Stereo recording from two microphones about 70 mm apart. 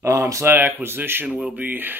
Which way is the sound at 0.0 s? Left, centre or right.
Right.